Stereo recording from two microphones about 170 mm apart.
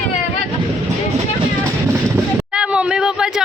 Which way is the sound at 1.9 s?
15° right (ahead or behind).